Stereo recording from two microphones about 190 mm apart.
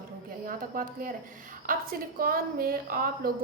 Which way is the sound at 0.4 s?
50° right (ahead or behind).